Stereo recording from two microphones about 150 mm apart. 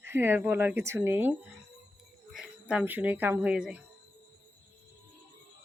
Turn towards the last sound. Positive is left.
turn(degrees=-5)  # may be behind; listen again after turning